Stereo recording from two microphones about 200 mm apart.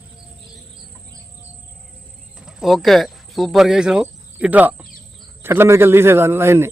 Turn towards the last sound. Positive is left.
turn(degrees=-10)  # may be behind; listen again after turning